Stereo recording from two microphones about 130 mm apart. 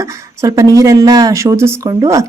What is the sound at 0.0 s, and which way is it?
A woman's voice, 25° right (ahead or behind).